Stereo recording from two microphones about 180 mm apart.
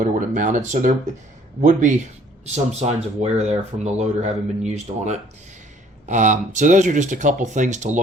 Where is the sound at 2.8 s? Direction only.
40° right (ahead or behind).